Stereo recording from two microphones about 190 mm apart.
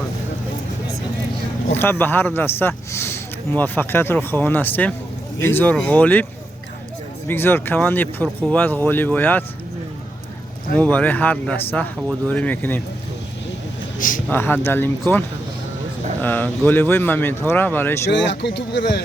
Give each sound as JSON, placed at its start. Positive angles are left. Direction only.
{"t": 1.7, "sound": "speech", "side_deg": 10}
{"t": 7.3, "sound": "speech", "side_deg": 10}
{"t": 10.8, "sound": "speech", "side_deg": 10}
{"t": 14.3, "sound": "speech", "side_deg": 10}
{"t": 16.2, "sound": "speech", "side_deg": 10}
{"t": 18.1, "sound": "speech", "side_deg": 70}